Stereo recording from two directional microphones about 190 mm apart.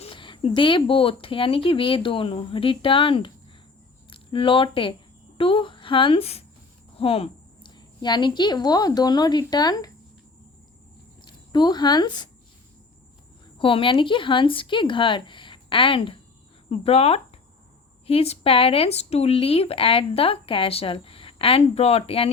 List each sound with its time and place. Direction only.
0.0 s a woman's voice: 25° left (ahead or behind)
11.3 s speech: 25° left (ahead or behind)
13.6 s speech: 30° left (ahead or behind)